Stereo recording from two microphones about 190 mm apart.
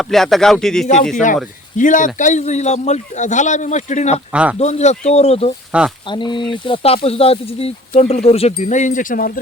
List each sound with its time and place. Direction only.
0.0 s speech: centre (ahead or behind)
1.1 s speech: 40° left (ahead or behind)
4.3 s speech: 5° right (ahead or behind)
4.5 s speech: 35° left (ahead or behind)